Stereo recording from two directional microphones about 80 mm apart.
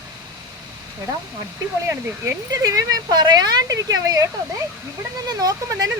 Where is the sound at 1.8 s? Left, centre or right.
Right.